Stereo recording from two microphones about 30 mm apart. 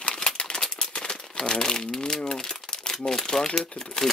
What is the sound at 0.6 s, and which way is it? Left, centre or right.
Crumpling, left.